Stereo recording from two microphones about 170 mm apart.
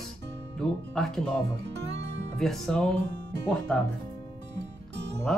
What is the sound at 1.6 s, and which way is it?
Music, 90° right.